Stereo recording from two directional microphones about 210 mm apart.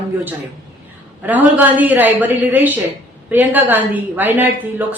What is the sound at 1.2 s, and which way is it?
A woman's voice, 10° right (ahead or behind).